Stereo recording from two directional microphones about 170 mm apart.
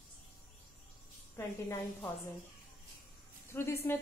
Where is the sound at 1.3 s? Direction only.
15° left (ahead or behind).